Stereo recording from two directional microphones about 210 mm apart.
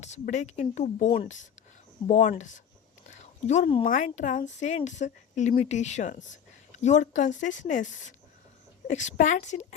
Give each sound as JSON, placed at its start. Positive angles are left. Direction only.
{"t": 0.0, "sound": "speech", "side_deg": 35}
{"t": 3.1, "sound": "a sound", "side_deg": 35}
{"t": 3.8, "sound": "speech", "side_deg": 40}